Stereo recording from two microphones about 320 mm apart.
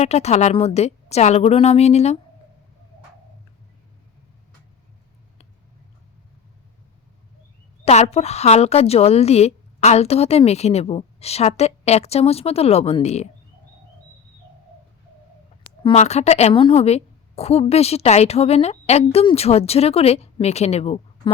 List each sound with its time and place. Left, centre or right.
0.0 s a woman's voice: left
7.9 s a woman's voice: centre
15.6 s a woman's voice: centre